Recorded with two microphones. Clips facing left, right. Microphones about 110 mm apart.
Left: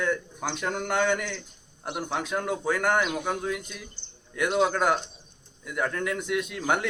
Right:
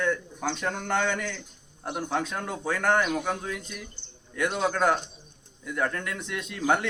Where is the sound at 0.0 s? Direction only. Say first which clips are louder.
Right 1 dB; 5° left (ahead or behind).